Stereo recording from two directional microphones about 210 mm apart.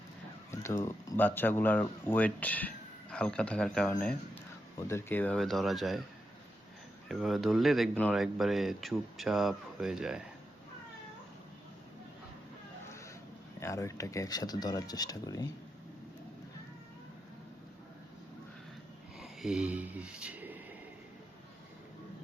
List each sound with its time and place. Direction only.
0.5 s speech: 15° left (ahead or behind)
7.1 s speech: centre (ahead or behind)
13.6 s speech: 15° left (ahead or behind)
19.2 s speech: centre (ahead or behind)